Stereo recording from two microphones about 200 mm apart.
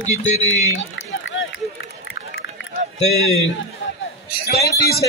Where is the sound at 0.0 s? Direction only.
35° left (ahead or behind).